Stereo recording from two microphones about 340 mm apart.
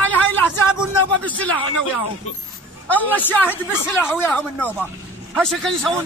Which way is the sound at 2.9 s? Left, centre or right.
Centre.